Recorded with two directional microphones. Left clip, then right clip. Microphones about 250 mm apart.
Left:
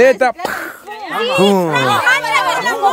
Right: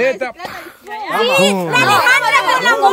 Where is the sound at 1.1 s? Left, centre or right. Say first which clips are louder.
Even; right.